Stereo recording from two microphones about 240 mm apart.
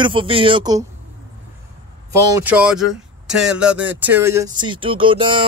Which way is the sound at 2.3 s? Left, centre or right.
Centre.